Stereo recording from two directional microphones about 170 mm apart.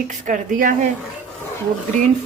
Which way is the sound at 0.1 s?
50° right (ahead or behind).